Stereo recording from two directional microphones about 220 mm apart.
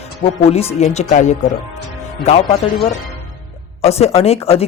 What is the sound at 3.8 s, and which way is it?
Speech, 30° left (ahead or behind).